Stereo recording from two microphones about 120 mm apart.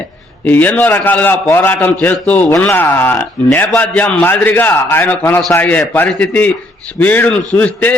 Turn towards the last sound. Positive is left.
turn(degrees=10)  # may be behind; listen again after turning